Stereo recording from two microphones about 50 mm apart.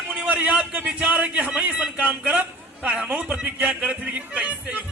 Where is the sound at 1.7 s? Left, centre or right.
Centre.